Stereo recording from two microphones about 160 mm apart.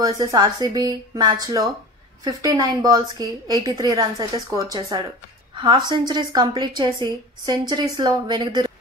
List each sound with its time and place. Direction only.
0.0 s a woman's voice: 25° right (ahead or behind)